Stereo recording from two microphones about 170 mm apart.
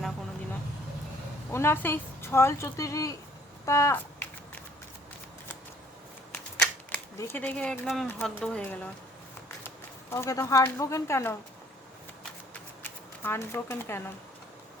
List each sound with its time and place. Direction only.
1.5 s a woman's voice: 15° left (ahead or behind)
6.3 s typewriter: 5° left (ahead or behind)
7.2 s a woman's voice: 10° left (ahead or behind)
12.8 s speech: 15° left (ahead or behind)